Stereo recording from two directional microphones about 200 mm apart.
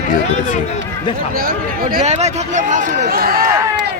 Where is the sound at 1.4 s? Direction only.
45° right (ahead or behind).